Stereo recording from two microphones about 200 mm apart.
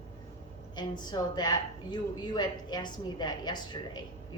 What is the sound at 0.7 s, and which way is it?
A woman's voice, 20° left (ahead or behind).